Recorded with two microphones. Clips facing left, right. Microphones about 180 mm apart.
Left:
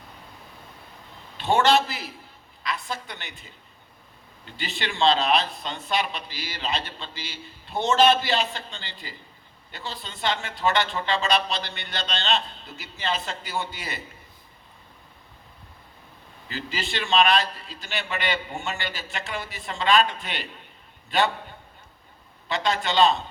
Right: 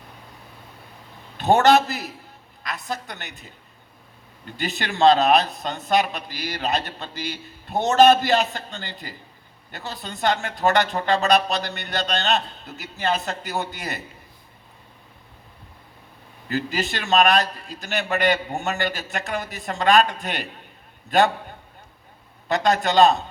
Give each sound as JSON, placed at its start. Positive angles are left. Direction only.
{"t": 1.4, "sound": "speech", "side_deg": -45}
{"t": 16.5, "sound": "speech", "side_deg": -45}
{"t": 22.4, "sound": "speech", "side_deg": -45}